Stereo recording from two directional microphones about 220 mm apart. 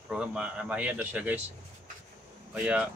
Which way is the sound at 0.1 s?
5° right (ahead or behind).